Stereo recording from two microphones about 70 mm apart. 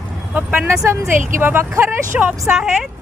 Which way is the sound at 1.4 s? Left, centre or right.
Right.